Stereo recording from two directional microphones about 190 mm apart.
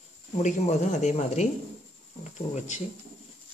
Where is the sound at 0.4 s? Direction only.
40° left (ahead or behind).